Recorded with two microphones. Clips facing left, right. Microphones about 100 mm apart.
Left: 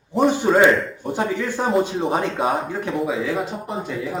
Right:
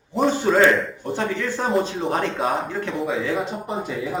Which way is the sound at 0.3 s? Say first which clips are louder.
Even; 15° left (ahead or behind).